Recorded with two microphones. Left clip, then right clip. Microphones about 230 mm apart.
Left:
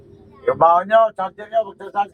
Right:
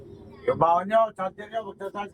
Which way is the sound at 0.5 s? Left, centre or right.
Centre.